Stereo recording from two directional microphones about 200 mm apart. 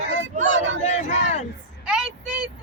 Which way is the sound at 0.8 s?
35° left (ahead or behind).